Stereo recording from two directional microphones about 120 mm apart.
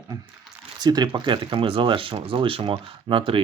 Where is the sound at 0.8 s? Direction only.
35° right (ahead or behind).